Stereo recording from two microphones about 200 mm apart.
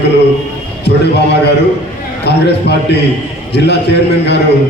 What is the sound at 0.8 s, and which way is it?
A man's voice, 55° left (ahead or behind).